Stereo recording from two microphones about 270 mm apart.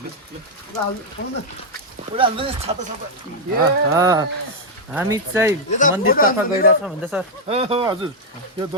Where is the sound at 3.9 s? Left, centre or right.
Centre.